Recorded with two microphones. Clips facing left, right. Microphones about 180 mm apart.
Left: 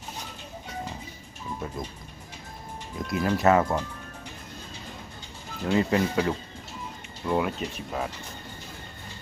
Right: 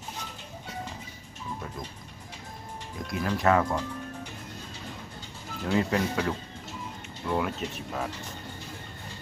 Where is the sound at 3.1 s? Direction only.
5° left (ahead or behind).